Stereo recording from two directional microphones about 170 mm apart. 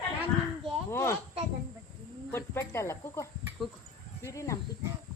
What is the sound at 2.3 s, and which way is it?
Speech, 15° left (ahead or behind).